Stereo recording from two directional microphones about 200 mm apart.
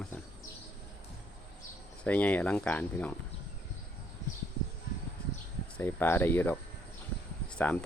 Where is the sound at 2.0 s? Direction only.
5° left (ahead or behind).